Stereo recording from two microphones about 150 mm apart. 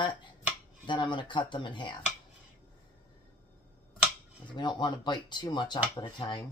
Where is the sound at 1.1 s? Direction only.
30° left (ahead or behind).